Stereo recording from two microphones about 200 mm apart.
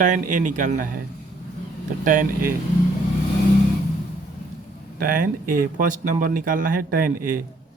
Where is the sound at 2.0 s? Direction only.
45° right (ahead or behind).